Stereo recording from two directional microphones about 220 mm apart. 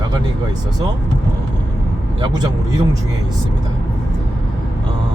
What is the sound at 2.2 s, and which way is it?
Speech, 20° right (ahead or behind).